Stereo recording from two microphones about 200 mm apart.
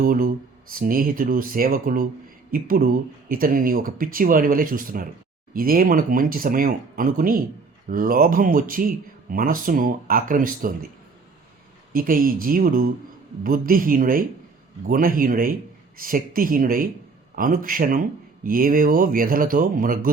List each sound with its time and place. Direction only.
0.0 s speech: 45° right (ahead or behind)
11.9 s speech: 45° right (ahead or behind)